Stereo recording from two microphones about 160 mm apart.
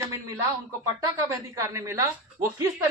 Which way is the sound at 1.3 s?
20° right (ahead or behind).